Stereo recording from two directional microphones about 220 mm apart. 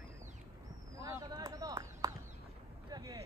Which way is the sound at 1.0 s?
15° right (ahead or behind).